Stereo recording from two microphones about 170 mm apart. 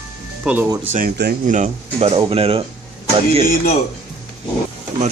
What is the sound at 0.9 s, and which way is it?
Speech, 65° right (ahead or behind).